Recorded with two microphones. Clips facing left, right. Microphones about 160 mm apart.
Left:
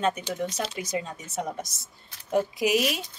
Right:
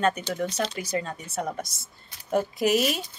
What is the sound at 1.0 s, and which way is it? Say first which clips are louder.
A woman's voice: right 1 dB; 20° left (ahead or behind).